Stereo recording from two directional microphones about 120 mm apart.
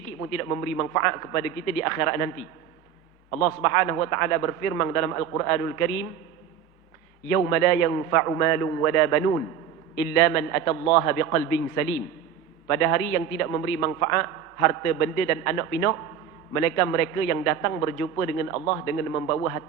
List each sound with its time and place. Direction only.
0.2 s a man's voice: 25° left (ahead or behind)
7.3 s a man's voice: 25° left (ahead or behind)
12.6 s a man's voice: 25° left (ahead or behind)